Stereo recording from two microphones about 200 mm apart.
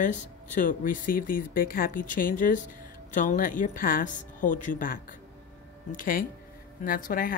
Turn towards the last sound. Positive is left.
turn(degrees=45)  # may be behind; listen again after turning